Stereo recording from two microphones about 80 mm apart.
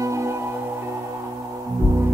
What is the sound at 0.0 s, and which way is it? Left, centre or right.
Music, right.